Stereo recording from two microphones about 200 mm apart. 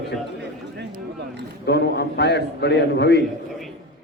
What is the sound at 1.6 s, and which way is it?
A man's voice, 55° left (ahead or behind).